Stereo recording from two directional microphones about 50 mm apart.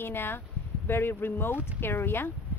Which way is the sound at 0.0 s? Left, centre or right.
Left.